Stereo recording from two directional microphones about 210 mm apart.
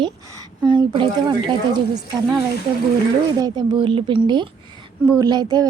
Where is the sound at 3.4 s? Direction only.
20° right (ahead or behind).